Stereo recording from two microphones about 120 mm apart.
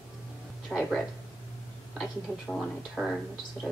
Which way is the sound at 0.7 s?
Centre (ahead or behind).